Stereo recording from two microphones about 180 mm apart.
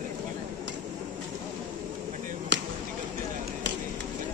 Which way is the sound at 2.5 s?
80° right.